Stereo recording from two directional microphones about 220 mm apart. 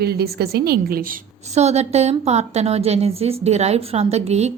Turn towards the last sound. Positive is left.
turn(degrees=-30)  # may be behind; listen again after turning